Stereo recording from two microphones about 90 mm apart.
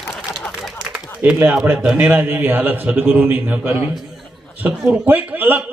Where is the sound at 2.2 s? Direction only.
25° right (ahead or behind).